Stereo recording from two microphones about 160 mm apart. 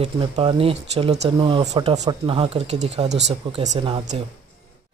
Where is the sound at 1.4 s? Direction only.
30° right (ahead or behind).